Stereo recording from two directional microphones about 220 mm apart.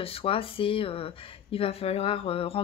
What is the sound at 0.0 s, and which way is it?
Speech, 25° left (ahead or behind).